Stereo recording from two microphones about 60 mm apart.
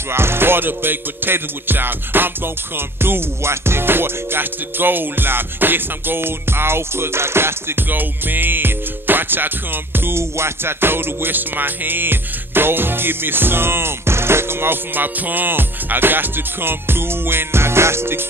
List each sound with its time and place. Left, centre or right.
0.1 s music: right